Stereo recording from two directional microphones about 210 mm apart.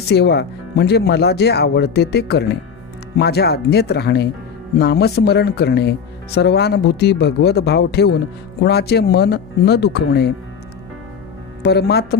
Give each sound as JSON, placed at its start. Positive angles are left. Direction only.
{"t": 0.1, "sound": "speech", "side_deg": 50}
{"t": 11.6, "sound": "speech", "side_deg": 50}